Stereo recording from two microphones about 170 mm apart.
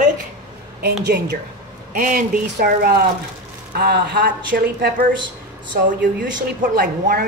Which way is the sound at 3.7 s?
70° right (ahead or behind).